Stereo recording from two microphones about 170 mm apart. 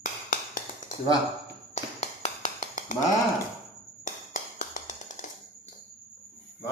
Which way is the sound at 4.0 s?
50° left (ahead or behind).